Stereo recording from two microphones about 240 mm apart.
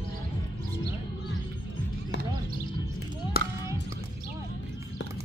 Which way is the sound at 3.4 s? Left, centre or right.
Left.